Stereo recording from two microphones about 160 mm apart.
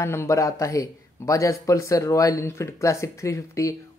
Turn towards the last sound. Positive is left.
turn(degrees=20)  # may be behind; listen again after turning